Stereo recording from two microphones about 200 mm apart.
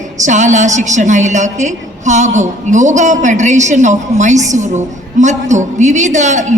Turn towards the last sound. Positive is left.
turn(degrees=-35)  # may be behind; listen again after turning